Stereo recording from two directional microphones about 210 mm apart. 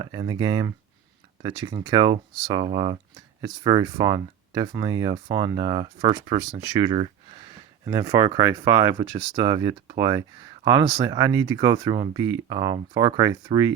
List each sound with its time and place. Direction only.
0.0 s speech: 20° right (ahead or behind)